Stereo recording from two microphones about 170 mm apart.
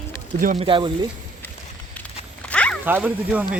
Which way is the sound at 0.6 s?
30° right (ahead or behind).